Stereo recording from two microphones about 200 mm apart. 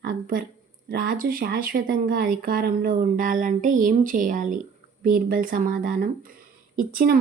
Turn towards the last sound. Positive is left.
turn(degrees=-45)  # may be behind; listen again after turning